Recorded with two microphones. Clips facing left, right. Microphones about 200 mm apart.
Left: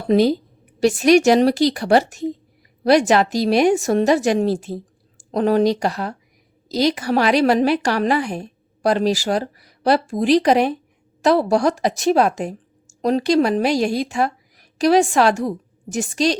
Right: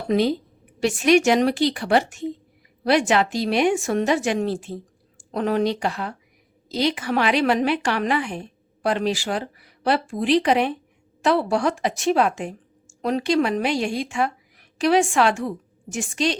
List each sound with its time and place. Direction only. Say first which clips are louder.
0.1 s a woman's voice: left 5 dB; 40° left (ahead or behind)